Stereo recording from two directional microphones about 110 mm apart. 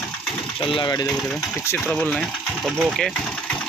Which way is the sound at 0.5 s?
55° left (ahead or behind).